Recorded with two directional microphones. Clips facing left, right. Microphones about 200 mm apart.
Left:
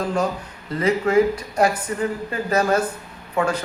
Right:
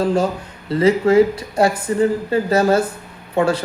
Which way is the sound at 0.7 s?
30° right (ahead or behind).